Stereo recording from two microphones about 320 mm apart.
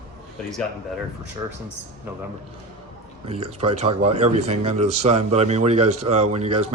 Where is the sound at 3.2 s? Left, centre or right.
Centre.